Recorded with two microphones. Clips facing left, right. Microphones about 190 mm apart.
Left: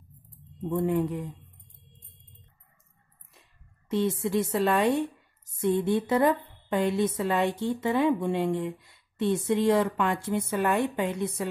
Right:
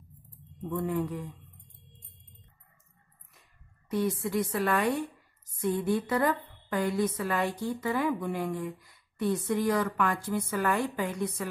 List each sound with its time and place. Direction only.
0.6 s a woman's voice: 25° left (ahead or behind)
3.9 s a woman's voice: 25° left (ahead or behind)